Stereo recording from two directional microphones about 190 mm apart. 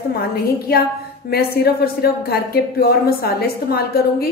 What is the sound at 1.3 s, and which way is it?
A woman's voice, 55° left (ahead or behind).